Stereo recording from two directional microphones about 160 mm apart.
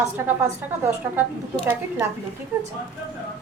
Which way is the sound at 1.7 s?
15° right (ahead or behind).